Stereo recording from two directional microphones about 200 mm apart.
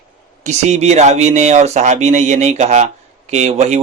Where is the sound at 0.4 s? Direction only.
35° right (ahead or behind).